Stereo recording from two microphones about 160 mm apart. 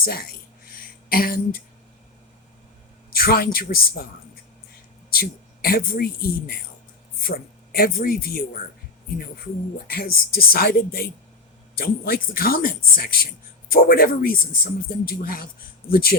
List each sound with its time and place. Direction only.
0.0 s a man's voice: 65° left (ahead or behind)
1.1 s a sound: 65° left (ahead or behind)
3.1 s a man's voice: 65° left (ahead or behind)
5.1 s speech: 70° left (ahead or behind)
7.3 s a man's voice: 70° left (ahead or behind)
9.8 s a man's voice: 70° left (ahead or behind)